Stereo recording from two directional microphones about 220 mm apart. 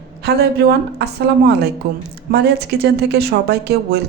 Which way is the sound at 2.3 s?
50° right (ahead or behind).